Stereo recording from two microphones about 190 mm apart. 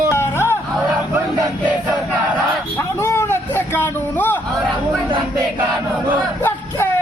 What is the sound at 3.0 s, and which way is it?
Speech, 10° left (ahead or behind).